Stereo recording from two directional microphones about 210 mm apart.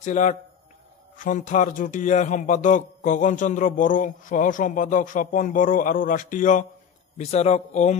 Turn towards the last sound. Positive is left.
turn(degrees=35)  # may be behind; listen again after turning